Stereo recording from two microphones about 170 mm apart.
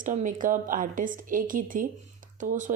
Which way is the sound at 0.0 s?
50° right (ahead or behind).